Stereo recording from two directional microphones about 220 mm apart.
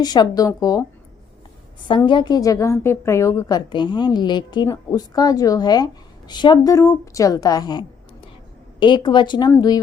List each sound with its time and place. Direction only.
0.0 s a woman's voice: 20° left (ahead or behind)
1.9 s a woman's voice: 20° left (ahead or behind)